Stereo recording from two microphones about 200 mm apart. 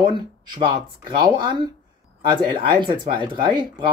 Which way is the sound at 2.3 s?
25° right (ahead or behind).